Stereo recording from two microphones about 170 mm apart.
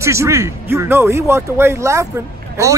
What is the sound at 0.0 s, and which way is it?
A man's voice, 15° right (ahead or behind).